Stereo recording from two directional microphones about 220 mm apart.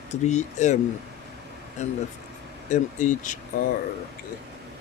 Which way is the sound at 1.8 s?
30° left (ahead or behind).